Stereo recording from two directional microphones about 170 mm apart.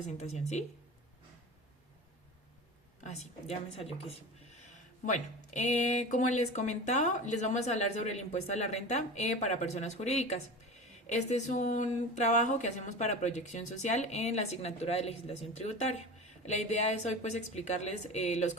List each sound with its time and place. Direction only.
0.0 s a woman's voice: 40° left (ahead or behind)
3.0 s a woman's voice: 40° left (ahead or behind)